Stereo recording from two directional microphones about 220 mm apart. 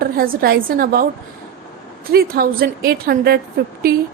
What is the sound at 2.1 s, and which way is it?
A woman's voice, 45° right (ahead or behind).